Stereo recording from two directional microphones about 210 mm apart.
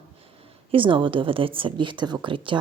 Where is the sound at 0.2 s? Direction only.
25° right (ahead or behind).